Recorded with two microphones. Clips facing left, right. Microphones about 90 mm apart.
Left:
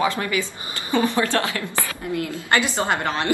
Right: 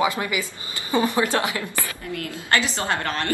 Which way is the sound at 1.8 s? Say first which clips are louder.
Left 4 dB; 20° left (ahead or behind).